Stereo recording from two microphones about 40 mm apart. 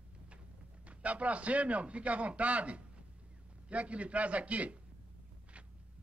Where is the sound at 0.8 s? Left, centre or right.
Right.